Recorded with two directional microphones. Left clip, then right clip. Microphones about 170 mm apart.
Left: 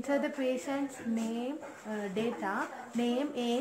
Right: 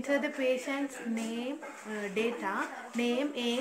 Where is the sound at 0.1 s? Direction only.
45° left (ahead or behind).